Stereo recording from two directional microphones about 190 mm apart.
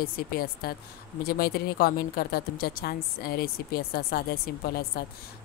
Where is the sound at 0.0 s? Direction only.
50° left (ahead or behind).